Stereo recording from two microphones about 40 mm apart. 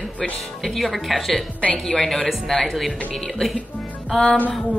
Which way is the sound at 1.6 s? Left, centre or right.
Left.